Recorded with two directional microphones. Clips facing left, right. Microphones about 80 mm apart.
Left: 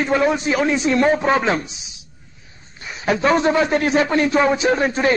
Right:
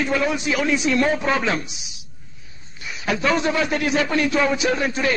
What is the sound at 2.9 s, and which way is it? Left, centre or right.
A man's voice, left.